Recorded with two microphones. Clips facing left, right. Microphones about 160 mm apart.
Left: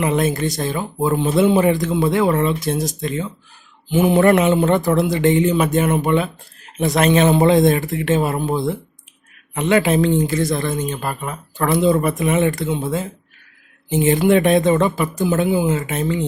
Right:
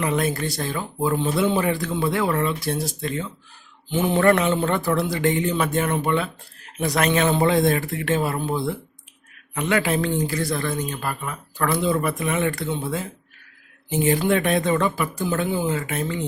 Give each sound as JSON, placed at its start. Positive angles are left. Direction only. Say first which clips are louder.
{"t": 0.0, "sound": "speech", "louder": "left 5 dB", "side_deg": 20}